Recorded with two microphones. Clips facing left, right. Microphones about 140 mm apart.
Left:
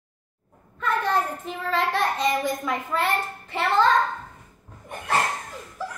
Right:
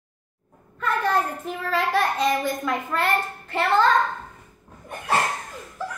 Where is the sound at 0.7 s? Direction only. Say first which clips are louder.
Right 1 dB; centre (ahead or behind).